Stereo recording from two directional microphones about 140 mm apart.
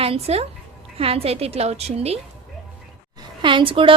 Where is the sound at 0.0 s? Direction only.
45° right (ahead or behind).